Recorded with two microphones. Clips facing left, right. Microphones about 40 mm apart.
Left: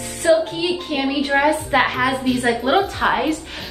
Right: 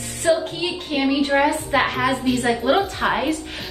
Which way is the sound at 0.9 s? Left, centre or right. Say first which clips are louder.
Right 2 dB; centre.